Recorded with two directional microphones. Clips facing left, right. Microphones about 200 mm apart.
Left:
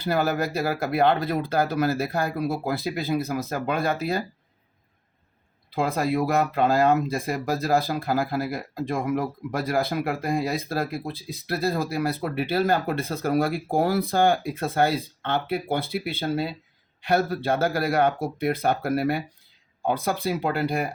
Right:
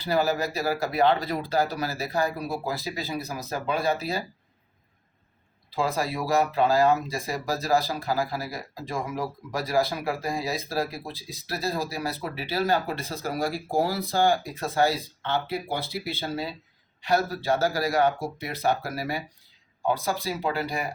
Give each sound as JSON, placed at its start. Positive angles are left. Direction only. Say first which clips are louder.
{"t": 0.0, "sound": "speech", "louder": "left 1 dB", "side_deg": 55}
{"t": 6.5, "sound": "speech", "louder": "even", "side_deg": 55}